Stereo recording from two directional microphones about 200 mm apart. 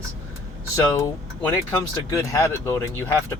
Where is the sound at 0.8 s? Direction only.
15° left (ahead or behind).